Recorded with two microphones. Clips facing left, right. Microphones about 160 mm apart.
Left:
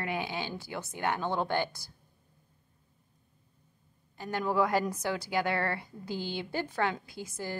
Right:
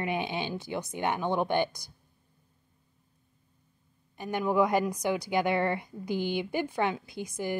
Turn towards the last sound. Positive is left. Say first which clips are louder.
# right 5 dB
turn(degrees=-15)  # may be behind; listen again after turning